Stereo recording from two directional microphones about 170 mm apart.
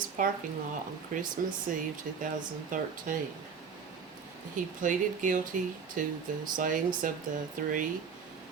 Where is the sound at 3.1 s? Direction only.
50° right (ahead or behind).